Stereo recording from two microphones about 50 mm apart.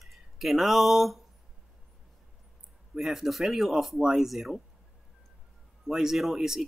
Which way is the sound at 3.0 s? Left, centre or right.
Centre.